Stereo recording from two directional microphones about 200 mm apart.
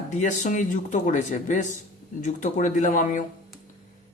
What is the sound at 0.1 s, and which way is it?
Speech, 40° left (ahead or behind).